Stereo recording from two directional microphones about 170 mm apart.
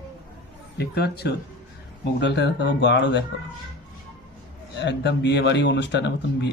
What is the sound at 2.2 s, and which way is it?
Speech, 90° left.